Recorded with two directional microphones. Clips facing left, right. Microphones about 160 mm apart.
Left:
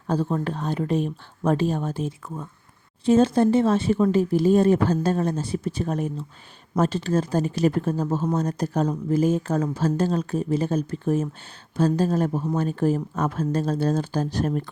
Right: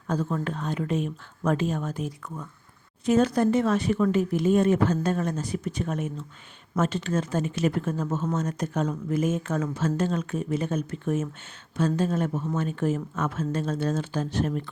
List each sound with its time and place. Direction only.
0.1 s speech: 30° left (ahead or behind)